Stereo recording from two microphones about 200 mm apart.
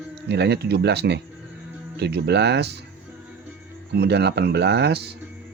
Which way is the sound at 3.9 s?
55° right (ahead or behind).